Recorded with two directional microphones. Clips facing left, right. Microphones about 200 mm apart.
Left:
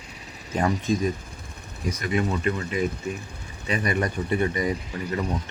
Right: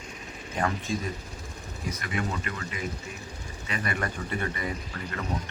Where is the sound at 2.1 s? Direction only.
25° left (ahead or behind).